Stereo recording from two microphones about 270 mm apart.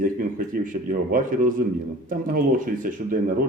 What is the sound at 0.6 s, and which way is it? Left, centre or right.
A man's voice, right.